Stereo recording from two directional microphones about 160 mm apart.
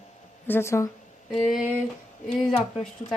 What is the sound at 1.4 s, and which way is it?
Speech, 5° right (ahead or behind).